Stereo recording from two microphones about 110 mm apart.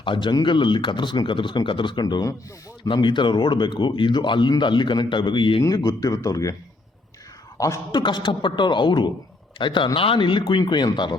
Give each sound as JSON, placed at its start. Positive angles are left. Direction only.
{"t": 0.0, "sound": "speech", "side_deg": 45}
{"t": 7.9, "sound": "speech", "side_deg": 45}